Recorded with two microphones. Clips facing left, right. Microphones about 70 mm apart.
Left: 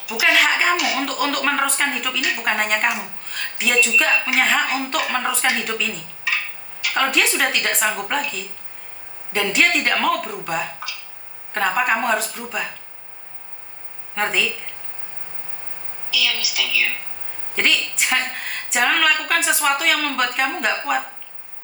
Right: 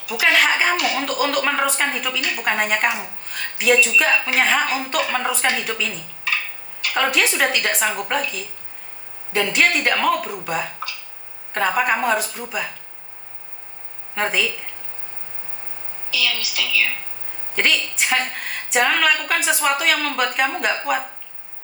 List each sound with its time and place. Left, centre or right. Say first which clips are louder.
0.1 s a woman's voice: even; centre
6.9 s a woman's voice: even; centre
14.2 s a woman's voice: even; centre
16.0 s a woman's voice: even; right
17.5 s a woman's voice: even; centre